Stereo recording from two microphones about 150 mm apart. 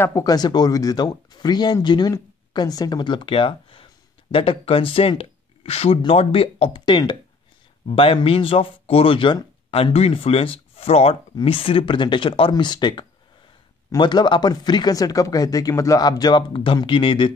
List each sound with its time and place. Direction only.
0.0 s speech: 20° left (ahead or behind)